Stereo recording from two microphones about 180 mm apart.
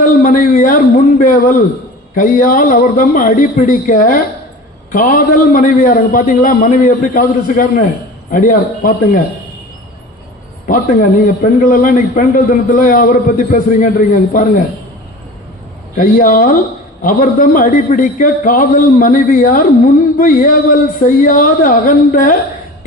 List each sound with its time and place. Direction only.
0.2 s a man's voice: 50° left (ahead or behind)
10.7 s a man's voice: 50° left (ahead or behind)
16.0 s a man's voice: 50° left (ahead or behind)